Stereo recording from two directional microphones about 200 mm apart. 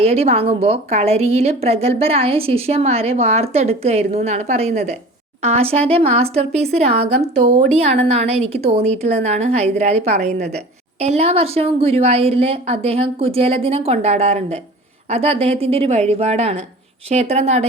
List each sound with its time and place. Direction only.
0.0 s a woman's voice: 30° right (ahead or behind)